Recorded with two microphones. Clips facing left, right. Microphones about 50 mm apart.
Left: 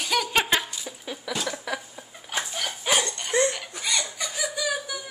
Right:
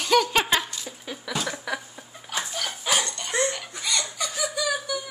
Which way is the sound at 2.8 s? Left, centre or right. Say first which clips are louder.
Left 1 dB; centre.